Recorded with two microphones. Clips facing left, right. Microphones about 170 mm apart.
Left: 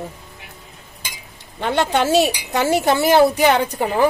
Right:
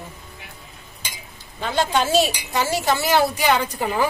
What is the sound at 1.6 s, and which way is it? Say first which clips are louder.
A woman's voice: left 3 dB; 65° left (ahead or behind).